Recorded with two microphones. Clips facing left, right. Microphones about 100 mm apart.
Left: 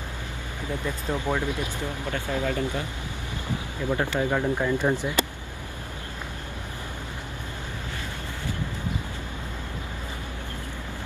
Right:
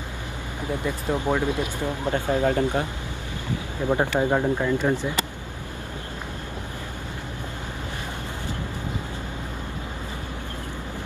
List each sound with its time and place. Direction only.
0.8 s speech: 15° right (ahead or behind)
2.4 s speech: 55° right (ahead or behind)
3.9 s speech: 25° right (ahead or behind)
4.6 s speech: 10° left (ahead or behind)